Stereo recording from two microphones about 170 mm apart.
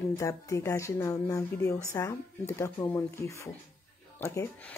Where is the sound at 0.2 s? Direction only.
20° left (ahead or behind).